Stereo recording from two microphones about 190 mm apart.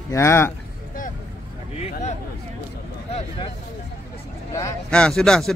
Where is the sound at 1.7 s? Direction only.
35° left (ahead or behind).